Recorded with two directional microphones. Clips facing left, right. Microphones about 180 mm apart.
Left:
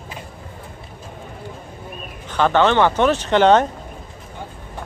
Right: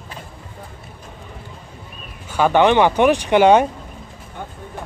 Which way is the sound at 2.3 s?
10° right (ahead or behind).